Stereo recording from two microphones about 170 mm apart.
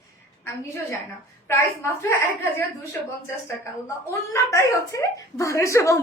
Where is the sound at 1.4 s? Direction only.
15° left (ahead or behind).